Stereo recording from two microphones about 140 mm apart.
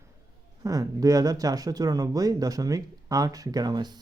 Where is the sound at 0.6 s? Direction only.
25° right (ahead or behind).